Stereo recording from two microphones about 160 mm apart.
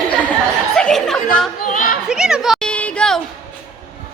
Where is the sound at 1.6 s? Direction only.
60° left (ahead or behind).